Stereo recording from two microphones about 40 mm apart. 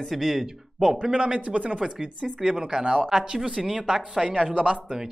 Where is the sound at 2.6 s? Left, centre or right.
Centre.